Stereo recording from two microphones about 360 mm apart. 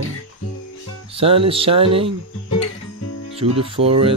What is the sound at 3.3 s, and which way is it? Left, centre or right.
Speech, centre.